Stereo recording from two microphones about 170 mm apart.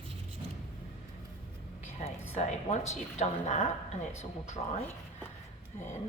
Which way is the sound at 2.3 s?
40° left (ahead or behind).